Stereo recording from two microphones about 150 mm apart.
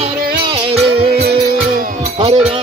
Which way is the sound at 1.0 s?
90° right.